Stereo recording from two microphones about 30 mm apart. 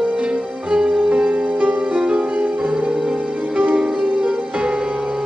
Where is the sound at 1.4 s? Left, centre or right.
Right.